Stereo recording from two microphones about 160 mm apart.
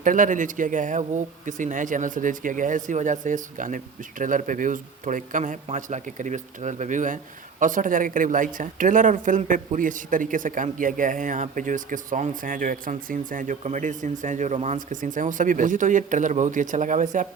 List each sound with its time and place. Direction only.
0.0 s speech: 55° right (ahead or behind)